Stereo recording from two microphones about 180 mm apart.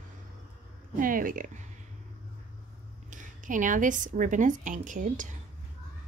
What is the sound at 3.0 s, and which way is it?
Speech, 45° right (ahead or behind).